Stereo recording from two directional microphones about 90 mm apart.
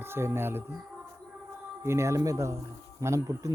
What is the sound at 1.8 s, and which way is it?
Speech, 30° right (ahead or behind).